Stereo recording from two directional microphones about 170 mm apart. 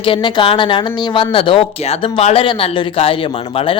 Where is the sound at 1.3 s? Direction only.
30° left (ahead or behind).